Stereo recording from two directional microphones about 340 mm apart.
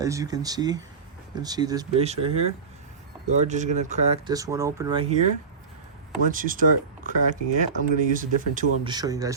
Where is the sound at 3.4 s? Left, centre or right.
Right.